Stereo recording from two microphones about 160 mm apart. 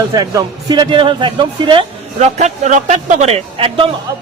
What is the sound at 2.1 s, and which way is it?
A man's voice, 45° right (ahead or behind).